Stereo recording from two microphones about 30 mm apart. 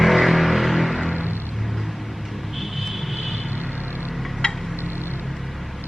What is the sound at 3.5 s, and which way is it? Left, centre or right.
Vehicle, right.